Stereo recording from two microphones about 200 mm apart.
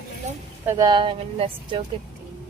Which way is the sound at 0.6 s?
15° right (ahead or behind).